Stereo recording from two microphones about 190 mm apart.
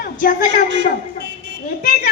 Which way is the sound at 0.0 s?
45° left (ahead or behind).